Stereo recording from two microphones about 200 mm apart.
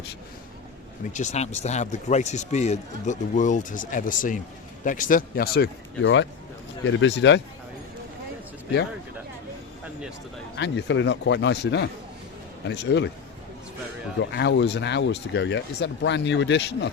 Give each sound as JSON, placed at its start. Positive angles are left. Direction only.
{"t": 1.1, "sound": "a man's voice", "side_deg": 35}
{"t": 10.6, "sound": "speech", "side_deg": 65}
{"t": 14.2, "sound": "speech", "side_deg": 60}